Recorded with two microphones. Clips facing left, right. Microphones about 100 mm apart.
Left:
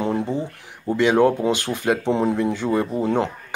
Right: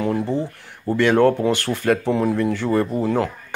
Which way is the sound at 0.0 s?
20° left (ahead or behind).